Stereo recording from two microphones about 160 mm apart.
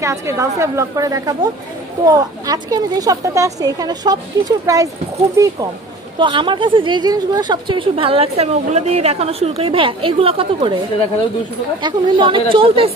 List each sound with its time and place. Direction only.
0.0 s a woman's voice: 20° right (ahead or behind)
11.8 s a woman's voice: 30° right (ahead or behind)